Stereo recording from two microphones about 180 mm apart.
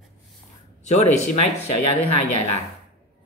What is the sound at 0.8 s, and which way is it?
Speech, 40° left (ahead or behind).